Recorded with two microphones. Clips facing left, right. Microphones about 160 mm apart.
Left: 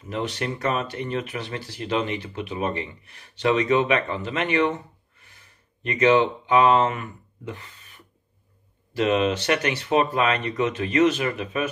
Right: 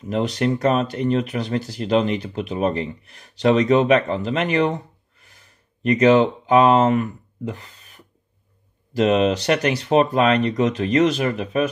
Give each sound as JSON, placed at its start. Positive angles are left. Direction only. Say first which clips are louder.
{"t": 0.1, "sound": "speech", "louder": "right 7 dB", "side_deg": -40}